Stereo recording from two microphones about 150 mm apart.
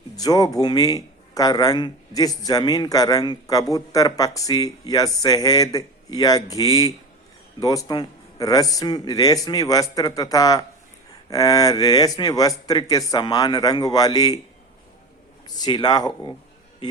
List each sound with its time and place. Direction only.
0.2 s a man's voice: 25° left (ahead or behind)
15.4 s a man's voice: 30° left (ahead or behind)